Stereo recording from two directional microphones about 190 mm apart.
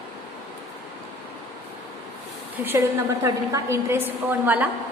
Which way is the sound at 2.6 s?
10° right (ahead or behind).